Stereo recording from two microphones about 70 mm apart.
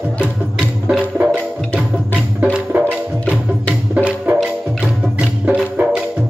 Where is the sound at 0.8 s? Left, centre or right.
Centre.